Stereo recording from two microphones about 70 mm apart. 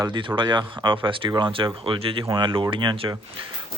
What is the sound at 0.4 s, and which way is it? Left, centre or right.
Speech, right.